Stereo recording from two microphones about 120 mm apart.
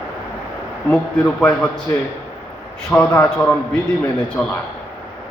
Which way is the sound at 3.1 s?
20° left (ahead or behind).